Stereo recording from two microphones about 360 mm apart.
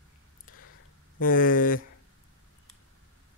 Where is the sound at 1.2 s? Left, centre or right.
Left.